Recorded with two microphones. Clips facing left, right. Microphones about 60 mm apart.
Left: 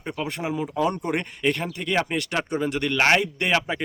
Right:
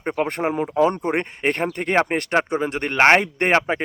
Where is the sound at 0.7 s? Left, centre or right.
Right.